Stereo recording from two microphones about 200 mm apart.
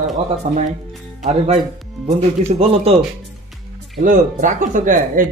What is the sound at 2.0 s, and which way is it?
Speech, 30° right (ahead or behind).